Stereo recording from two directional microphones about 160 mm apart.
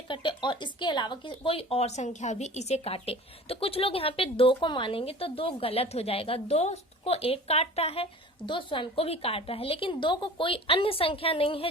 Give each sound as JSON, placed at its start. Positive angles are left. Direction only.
{"t": 0.1, "sound": "speech", "side_deg": 30}